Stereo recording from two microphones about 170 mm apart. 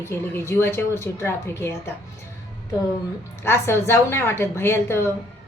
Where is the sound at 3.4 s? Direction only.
15° left (ahead or behind).